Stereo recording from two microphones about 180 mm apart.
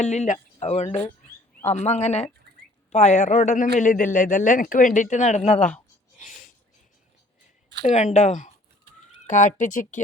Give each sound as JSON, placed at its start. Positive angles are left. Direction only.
{"t": 0.0, "sound": "speech", "side_deg": 40}
{"t": 5.5, "sound": "speech", "side_deg": 5}
{"t": 6.1, "sound": "a sound", "side_deg": 45}
{"t": 7.9, "sound": "speech", "side_deg": 40}